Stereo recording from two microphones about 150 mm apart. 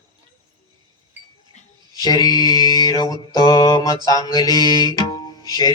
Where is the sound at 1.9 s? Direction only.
25° left (ahead or behind).